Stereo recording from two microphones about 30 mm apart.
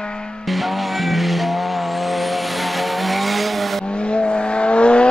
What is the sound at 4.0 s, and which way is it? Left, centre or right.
Vehicle, left.